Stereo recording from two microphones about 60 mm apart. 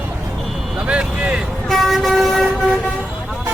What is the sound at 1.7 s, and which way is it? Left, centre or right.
Vehicle, centre.